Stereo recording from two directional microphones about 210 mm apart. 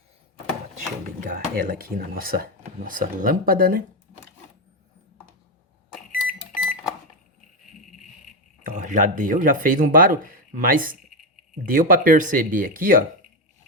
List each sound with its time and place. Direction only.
1.2 s speech: 40° right (ahead or behind)
5.9 s microwave oven: 5° right (ahead or behind)
8.7 s speech: 35° right (ahead or behind)